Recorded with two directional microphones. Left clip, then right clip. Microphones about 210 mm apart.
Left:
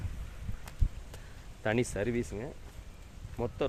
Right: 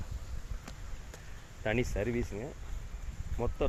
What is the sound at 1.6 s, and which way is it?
Speech, 20° left (ahead or behind).